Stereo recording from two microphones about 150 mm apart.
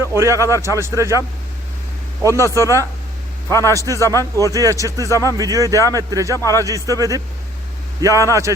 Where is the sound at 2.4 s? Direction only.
20° right (ahead or behind).